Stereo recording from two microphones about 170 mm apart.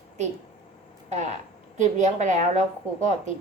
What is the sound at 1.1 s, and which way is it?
A woman's voice, 45° right (ahead or behind).